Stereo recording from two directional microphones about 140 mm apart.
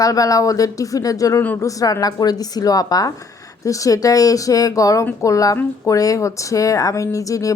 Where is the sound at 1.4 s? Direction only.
10° left (ahead or behind).